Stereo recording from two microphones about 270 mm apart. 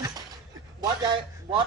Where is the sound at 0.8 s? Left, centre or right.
Centre.